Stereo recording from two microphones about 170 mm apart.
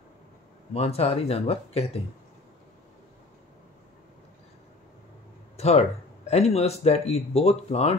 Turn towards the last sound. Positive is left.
turn(degrees=35)  # may be behind; listen again after turning